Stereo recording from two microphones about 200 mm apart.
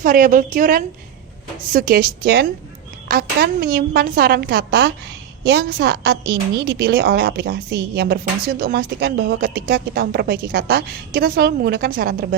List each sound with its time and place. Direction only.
0.0 s a woman's voice: 45° right (ahead or behind)